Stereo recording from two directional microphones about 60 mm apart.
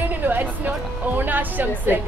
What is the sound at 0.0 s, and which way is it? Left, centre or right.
Music, right.